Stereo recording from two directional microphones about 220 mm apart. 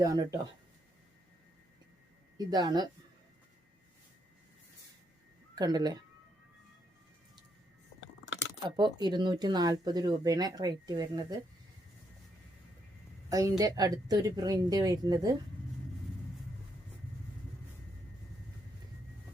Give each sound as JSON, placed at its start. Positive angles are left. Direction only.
{"t": 0.0, "sound": "speech", "side_deg": -15}
{"t": 2.4, "sound": "speech", "side_deg": -15}
{"t": 5.5, "sound": "speech", "side_deg": -15}
{"t": 8.2, "sound": "speech", "side_deg": -20}
{"t": 13.3, "sound": "speech", "side_deg": -15}